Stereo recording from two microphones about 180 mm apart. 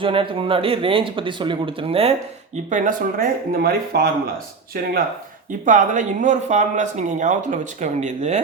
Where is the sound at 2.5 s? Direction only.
45° right (ahead or behind).